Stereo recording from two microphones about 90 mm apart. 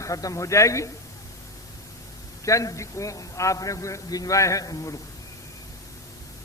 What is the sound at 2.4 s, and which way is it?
A man's voice, 35° left (ahead or behind).